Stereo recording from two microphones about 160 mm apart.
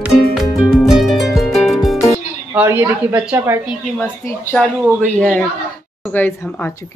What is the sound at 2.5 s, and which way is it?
A woman's voice, 15° right (ahead or behind).